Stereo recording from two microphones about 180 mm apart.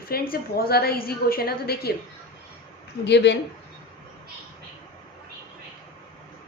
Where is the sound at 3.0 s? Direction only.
75° left (ahead or behind).